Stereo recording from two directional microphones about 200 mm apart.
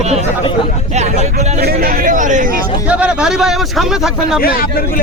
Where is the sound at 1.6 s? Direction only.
45° right (ahead or behind).